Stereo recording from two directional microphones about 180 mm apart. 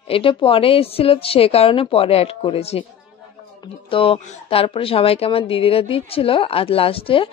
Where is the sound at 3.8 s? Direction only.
30° left (ahead or behind).